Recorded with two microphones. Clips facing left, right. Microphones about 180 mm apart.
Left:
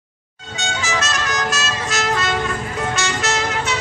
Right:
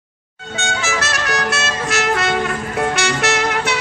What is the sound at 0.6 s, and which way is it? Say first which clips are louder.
Music: right 2 dB; 70° right (ahead or behind).